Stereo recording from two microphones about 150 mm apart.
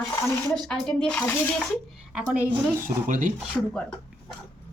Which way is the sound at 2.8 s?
60° right (ahead or behind).